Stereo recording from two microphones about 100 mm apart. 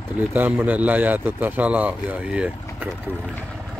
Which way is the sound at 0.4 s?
15° right (ahead or behind).